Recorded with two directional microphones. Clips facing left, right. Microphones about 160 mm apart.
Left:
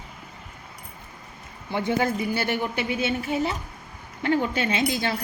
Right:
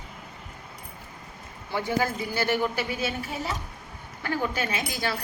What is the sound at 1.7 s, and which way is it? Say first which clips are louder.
A woman's voice: left 3 dB; 20° left (ahead or behind).